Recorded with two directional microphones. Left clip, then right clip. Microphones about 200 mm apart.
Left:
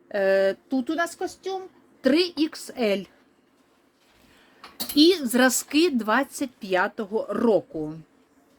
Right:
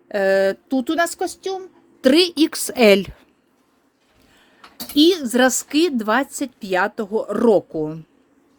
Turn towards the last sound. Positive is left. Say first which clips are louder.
# right 6 dB
turn(degrees=-45)  # may be behind; listen again after turning